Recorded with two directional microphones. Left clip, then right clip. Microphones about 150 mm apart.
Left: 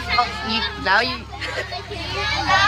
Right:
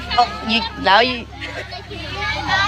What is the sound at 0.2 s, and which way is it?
Speech, 15° right (ahead or behind).